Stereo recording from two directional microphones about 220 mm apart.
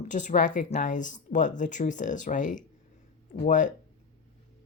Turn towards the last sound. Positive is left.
turn(degrees=35)  # may be behind; listen again after turning